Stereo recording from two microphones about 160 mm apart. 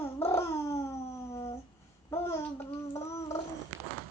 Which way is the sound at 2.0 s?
15° left (ahead or behind).